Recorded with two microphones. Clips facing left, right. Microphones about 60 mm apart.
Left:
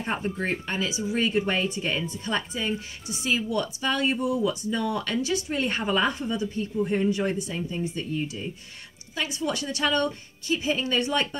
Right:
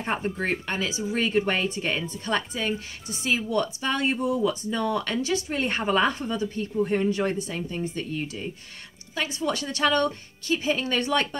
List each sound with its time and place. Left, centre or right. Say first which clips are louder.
0.0 s speech: right 1 dB; right
3.1 s speech: even; right
4.4 s speech: right 1 dB; right
8.0 s speech: left 1 dB; right
9.1 s speech: right 1 dB; right